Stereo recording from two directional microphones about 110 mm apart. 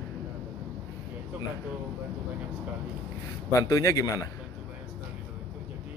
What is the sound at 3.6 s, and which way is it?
Speech, 30° left (ahead or behind).